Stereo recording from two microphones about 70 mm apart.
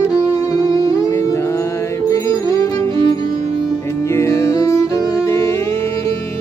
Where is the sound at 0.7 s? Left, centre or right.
Left.